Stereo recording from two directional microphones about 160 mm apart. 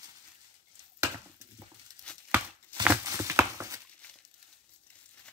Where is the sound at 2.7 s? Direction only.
10° left (ahead or behind).